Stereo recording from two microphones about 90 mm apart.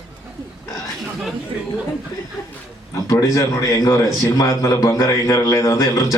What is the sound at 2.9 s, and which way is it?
A man's voice, 40° left (ahead or behind).